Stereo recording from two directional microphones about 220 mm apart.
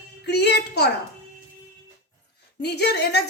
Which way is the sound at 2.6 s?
50° left (ahead or behind).